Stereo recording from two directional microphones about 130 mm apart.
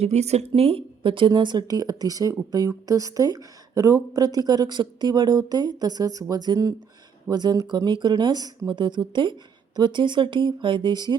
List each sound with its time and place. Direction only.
0.0 s speech: 55° right (ahead or behind); by 11.2 s 35° right (ahead or behind)